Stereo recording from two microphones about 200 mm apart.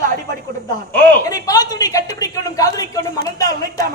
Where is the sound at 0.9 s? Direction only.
15° left (ahead or behind).